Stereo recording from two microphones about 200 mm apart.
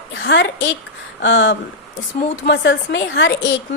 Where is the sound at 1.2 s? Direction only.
70° left (ahead or behind).